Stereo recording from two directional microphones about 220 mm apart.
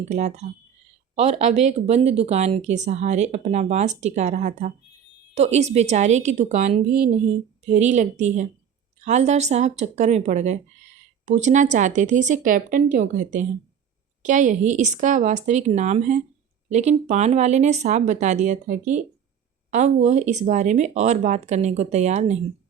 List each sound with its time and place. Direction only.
0.0 s speech: 30° right (ahead or behind)